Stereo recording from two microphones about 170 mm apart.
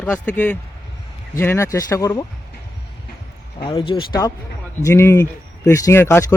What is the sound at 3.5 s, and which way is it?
Speech, 30° left (ahead or behind).